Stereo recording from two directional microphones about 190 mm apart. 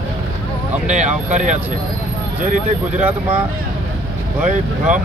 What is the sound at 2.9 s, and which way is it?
Speech, 10° right (ahead or behind).